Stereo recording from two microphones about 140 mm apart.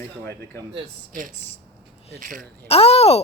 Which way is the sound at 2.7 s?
45° left (ahead or behind).